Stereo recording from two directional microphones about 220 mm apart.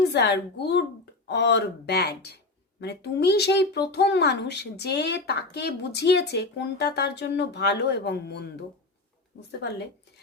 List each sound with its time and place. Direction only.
0.1 s a child's voice: 50° left (ahead or behind)